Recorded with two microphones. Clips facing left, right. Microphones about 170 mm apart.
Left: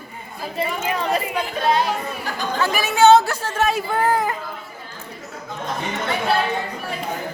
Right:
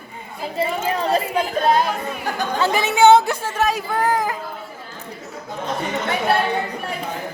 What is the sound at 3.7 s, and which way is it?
Speech, 5° left (ahead or behind).